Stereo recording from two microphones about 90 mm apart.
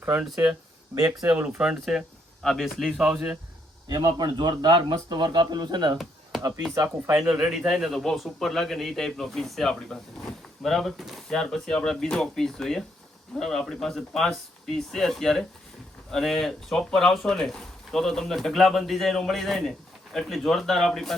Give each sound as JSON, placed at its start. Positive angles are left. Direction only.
{"t": 0.9, "sound": "speech", "side_deg": -40}
{"t": 1.5, "sound": "speech", "side_deg": -5}
{"t": 2.4, "sound": "a man's voice", "side_deg": 5}
{"t": 3.8, "sound": "speech", "side_deg": -50}
{"t": 6.7, "sound": "speech", "side_deg": -30}
{"t": 7.2, "sound": "a man's voice", "side_deg": -10}